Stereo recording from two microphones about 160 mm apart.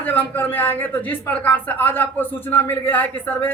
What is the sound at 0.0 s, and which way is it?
A woman's voice, 10° left (ahead or behind).